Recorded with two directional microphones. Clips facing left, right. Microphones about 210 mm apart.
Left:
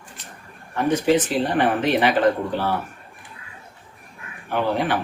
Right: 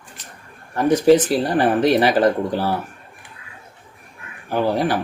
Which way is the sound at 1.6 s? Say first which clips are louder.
Right 4 dB; 40° right (ahead or behind).